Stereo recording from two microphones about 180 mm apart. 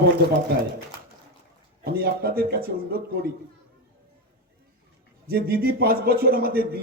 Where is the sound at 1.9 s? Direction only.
60° right (ahead or behind).